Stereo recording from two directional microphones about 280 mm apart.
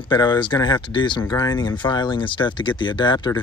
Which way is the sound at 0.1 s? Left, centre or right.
Centre.